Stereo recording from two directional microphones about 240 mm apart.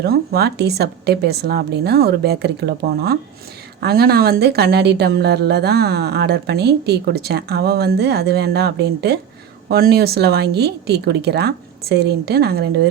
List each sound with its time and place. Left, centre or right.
0.0 s speech: right